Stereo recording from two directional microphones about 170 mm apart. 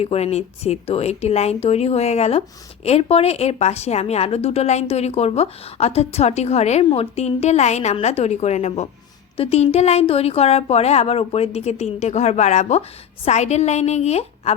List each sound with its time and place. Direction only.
0.0 s a woman's voice: 35° left (ahead or behind)